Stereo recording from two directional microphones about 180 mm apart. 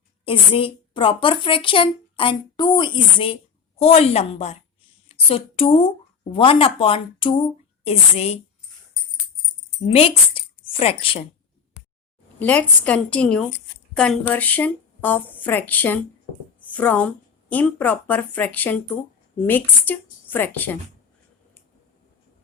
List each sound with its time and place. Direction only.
0.3 s a woman's voice: 30° left (ahead or behind)
9.8 s speech: 35° left (ahead or behind)
12.4 s speech: 10° left (ahead or behind)